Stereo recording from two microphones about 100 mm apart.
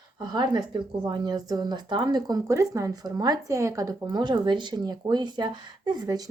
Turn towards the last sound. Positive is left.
turn(degrees=-40)  # may be behind; listen again after turning